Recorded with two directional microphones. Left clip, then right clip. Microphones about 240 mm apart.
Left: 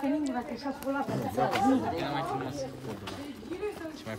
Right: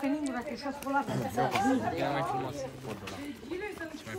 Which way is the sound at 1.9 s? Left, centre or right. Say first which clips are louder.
Right 1 dB; right.